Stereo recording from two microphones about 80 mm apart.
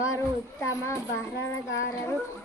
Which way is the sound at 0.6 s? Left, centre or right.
Left.